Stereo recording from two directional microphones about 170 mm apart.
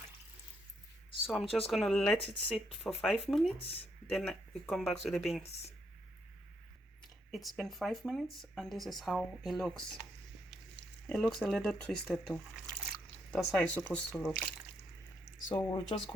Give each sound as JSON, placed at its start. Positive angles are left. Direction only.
{"t": 1.3, "sound": "speech", "side_deg": 0}
{"t": 3.6, "sound": "speech", "side_deg": 35}
{"t": 4.1, "sound": "speech", "side_deg": 5}
{"t": 7.3, "sound": "speech", "side_deg": 0}
{"t": 11.1, "sound": "speech", "side_deg": 5}
{"t": 15.5, "sound": "speech", "side_deg": 25}